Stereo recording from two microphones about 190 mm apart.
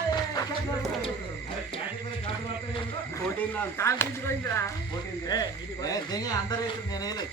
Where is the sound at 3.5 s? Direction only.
15° left (ahead or behind).